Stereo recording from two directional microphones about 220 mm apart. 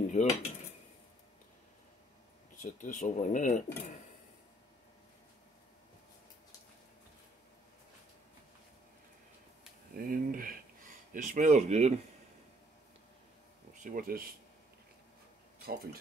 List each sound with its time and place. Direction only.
0.1 s cutlery: 30° left (ahead or behind)
2.6 s speech: 35° left (ahead or behind)
9.9 s a sound: 40° right (ahead or behind)
13.8 s speech: 40° right (ahead or behind)
15.6 s speech: 45° right (ahead or behind)